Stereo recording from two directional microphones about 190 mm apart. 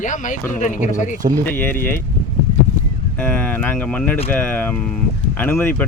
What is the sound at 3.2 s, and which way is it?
Speech, 10° left (ahead or behind).